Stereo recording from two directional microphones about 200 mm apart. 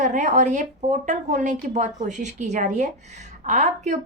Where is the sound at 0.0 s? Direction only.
35° right (ahead or behind).